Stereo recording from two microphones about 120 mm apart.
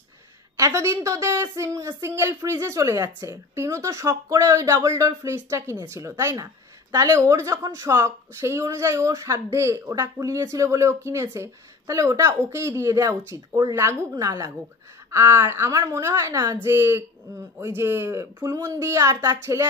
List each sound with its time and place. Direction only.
0.6 s a woman's voice: 25° right (ahead or behind)